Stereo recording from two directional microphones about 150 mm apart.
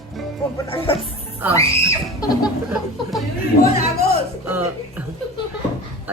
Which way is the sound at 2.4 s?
5° right (ahead or behind).